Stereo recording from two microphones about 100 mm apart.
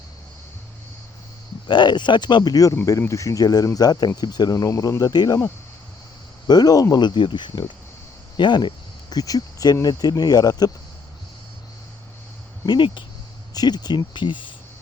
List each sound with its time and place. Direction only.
1.6 s speech: 50° left (ahead or behind)
6.5 s speech: 40° left (ahead or behind)
12.6 s speech: 50° left (ahead or behind)